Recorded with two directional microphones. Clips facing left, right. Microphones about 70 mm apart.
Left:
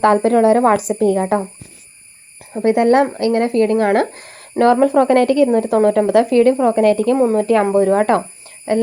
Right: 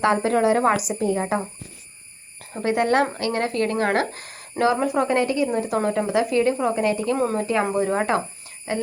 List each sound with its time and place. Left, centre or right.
0.0 s a woman's voice: left
0.9 s speech: left
1.2 s speech: left
2.6 s speech: left
4.6 s speech: left
5.5 s a woman's voice: left
6.1 s a woman's voice: left
7.6 s speech: left
7.9 s a woman's voice: left